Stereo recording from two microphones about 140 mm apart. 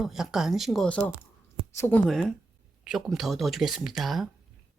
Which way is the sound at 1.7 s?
15° left (ahead or behind).